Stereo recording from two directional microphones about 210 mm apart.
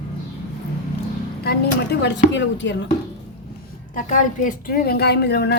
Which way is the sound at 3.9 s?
35° left (ahead or behind).